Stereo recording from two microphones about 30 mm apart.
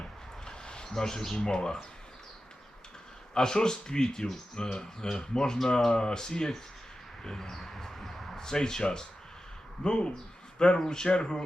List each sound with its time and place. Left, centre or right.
0.4 s a sound: left
0.9 s speech: centre
3.3 s speech: left